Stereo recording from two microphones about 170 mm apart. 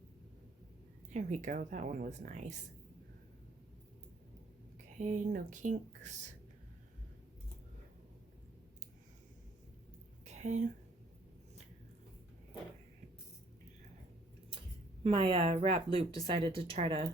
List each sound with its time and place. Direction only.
1.1 s a woman's voice: 45° right (ahead or behind)
4.9 s a woman's voice: 45° right (ahead or behind)
10.2 s a sound: 45° right (ahead or behind)
15.0 s speech: 30° right (ahead or behind)